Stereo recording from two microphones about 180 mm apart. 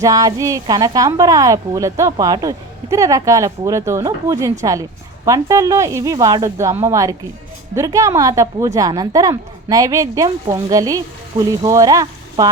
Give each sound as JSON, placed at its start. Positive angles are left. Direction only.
{"t": 0.0, "sound": "a woman's voice", "side_deg": -20}